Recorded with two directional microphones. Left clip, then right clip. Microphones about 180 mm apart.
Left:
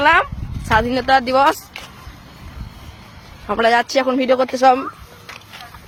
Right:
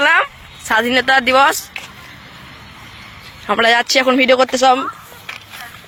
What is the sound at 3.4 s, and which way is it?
Speech, 5° right (ahead or behind).